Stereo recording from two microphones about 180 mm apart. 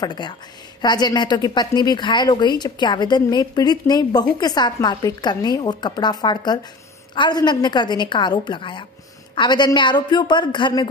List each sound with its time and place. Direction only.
0.0 s a woman's voice: 25° left (ahead or behind)